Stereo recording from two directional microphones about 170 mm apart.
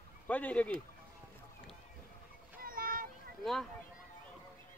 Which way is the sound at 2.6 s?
55° right (ahead or behind).